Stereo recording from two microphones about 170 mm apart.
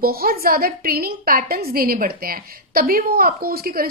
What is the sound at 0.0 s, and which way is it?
A woman's voice, 60° right (ahead or behind).